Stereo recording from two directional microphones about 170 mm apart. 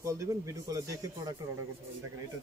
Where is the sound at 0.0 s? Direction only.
15° right (ahead or behind).